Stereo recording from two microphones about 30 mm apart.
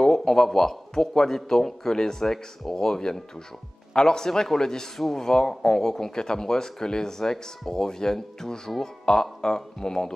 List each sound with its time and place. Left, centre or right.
0.0 s speech: centre